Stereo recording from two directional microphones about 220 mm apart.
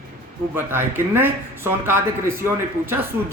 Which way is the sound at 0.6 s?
10° right (ahead or behind).